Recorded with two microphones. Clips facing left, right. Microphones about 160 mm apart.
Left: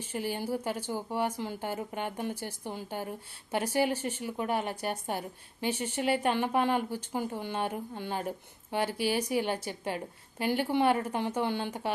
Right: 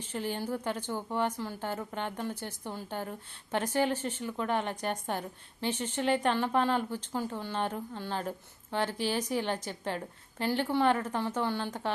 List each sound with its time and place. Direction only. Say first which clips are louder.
0.0 s a woman's voice: left 1 dB; 10° left (ahead or behind)